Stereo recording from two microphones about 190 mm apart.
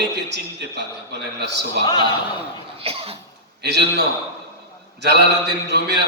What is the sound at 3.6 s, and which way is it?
Speech, 60° right (ahead or behind).